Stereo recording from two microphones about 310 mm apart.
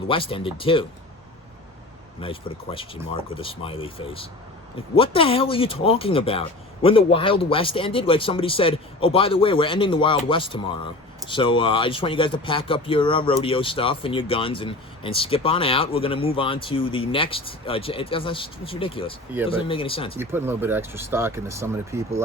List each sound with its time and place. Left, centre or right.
0.1 s speech: centre
2.2 s speech: centre
20.1 s speech: centre